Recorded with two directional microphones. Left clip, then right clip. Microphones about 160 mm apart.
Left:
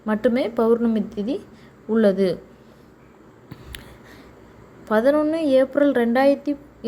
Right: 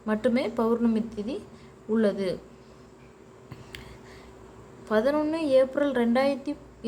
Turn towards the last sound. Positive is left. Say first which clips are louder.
# left 7 dB
turn(degrees=20)  # may be behind; listen again after turning